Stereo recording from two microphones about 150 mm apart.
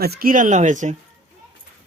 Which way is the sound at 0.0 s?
85° right.